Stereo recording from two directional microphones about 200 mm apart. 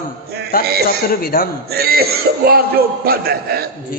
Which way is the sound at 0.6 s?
50° right (ahead or behind).